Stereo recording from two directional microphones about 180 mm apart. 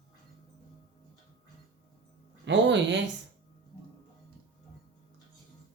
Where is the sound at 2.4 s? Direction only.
75° right (ahead or behind).